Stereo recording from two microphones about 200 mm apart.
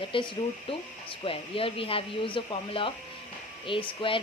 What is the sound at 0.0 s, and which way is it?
A woman's voice, 25° left (ahead or behind).